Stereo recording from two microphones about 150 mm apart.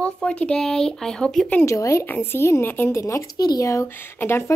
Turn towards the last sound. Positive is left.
turn(degrees=15)  # may be behind; listen again after turning